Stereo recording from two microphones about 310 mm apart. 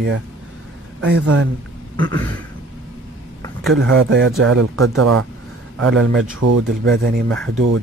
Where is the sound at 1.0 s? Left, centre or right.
Right.